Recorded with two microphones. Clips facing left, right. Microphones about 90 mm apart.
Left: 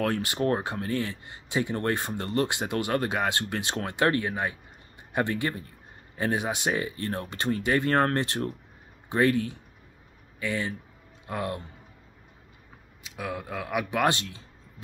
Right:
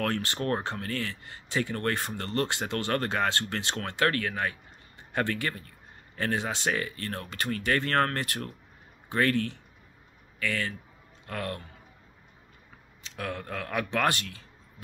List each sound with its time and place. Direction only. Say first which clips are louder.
0.0 s speech: left 3 dB; 15° left (ahead or behind)
13.0 s speech: left 1 dB; 10° left (ahead or behind)